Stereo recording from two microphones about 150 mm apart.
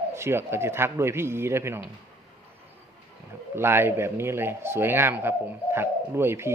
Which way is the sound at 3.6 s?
15° right (ahead or behind).